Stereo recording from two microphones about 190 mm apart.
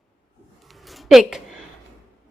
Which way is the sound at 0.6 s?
Centre (ahead or behind).